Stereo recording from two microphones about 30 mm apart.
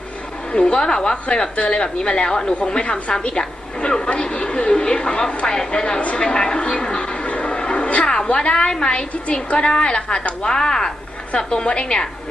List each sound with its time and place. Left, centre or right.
0.5 s a woman's voice: left
1.1 s a woman's voice: left
4.1 s a sound: left
5.5 s a woman's voice: left
6.1 s a sound: left
8.5 s a woman's voice: left
9.2 s a woman's voice: left
9.6 s a woman's voice: left
11.3 s a woman's voice: left